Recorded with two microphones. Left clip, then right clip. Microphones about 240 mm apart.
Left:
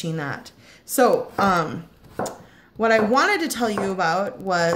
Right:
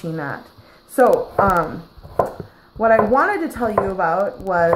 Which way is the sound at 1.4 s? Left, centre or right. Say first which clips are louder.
Right 3 dB; left.